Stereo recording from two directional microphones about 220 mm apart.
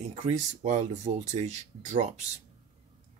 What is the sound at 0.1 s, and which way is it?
Speech, 30° right (ahead or behind).